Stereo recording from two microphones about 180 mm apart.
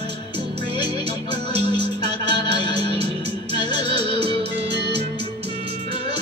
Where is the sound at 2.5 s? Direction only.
25° left (ahead or behind).